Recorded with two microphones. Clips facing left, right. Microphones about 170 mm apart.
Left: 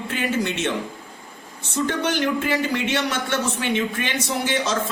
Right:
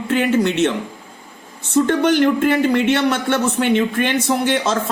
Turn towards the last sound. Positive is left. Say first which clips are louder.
# right 6 dB
turn(degrees=-55)  # may be behind; listen again after turning